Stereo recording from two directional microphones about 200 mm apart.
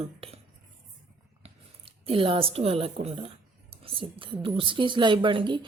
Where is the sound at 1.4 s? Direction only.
30° right (ahead or behind).